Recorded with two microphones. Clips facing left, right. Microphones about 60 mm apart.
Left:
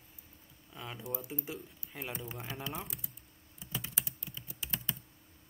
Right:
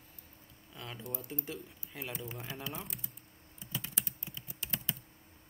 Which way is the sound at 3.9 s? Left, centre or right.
Centre.